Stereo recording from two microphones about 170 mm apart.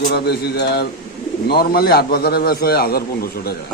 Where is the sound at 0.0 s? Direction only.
70° left (ahead or behind).